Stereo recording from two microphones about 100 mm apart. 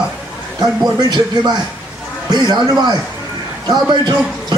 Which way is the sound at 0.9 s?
45° right (ahead or behind).